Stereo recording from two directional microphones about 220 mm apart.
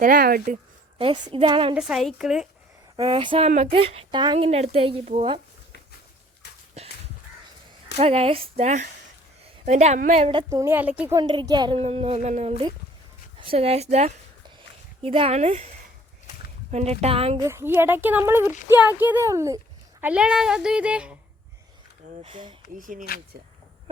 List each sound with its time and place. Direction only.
0.0 s speech: 40° right (ahead or behind)
0.9 s speech: 25° right (ahead or behind)
1.7 s speech: centre (ahead or behind)
2.9 s speech: 25° right (ahead or behind)
6.8 s crow: 30° right (ahead or behind)
7.9 s a woman's voice: 30° right (ahead or behind)
10.5 s speech: 10° right (ahead or behind)
11.2 s speech: 20° right (ahead or behind)
16.7 s speech: 30° right (ahead or behind)
17.4 s speech: 10° right (ahead or behind)
22.2 s speech: 25° right (ahead or behind)
22.8 s speech: 35° right (ahead or behind)